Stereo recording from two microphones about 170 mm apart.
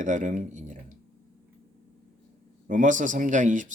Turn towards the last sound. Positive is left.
turn(degrees=-50)  # may be behind; listen again after turning